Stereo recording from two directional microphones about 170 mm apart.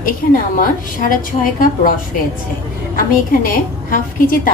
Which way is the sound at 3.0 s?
55° left (ahead or behind).